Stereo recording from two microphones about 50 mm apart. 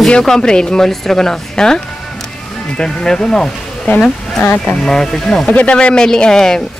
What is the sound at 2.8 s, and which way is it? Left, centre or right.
Speech, centre.